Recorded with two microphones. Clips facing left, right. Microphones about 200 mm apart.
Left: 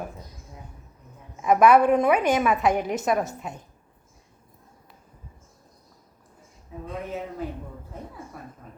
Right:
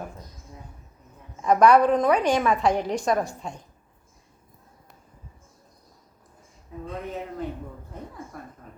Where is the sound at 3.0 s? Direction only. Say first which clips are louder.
Even; 5° left (ahead or behind).